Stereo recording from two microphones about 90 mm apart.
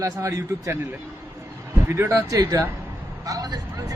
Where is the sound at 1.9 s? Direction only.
30° right (ahead or behind).